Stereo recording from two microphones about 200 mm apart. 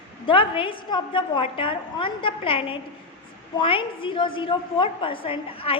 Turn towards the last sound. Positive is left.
turn(degrees=25)  # may be behind; listen again after turning